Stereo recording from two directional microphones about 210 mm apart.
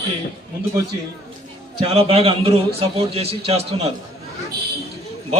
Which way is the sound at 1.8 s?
30° right (ahead or behind).